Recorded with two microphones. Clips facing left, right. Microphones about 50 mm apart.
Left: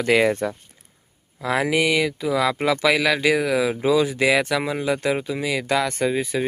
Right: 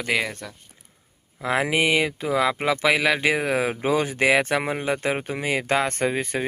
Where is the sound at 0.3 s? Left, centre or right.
Left.